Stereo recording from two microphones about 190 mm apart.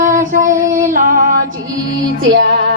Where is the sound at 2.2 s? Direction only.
70° right (ahead or behind).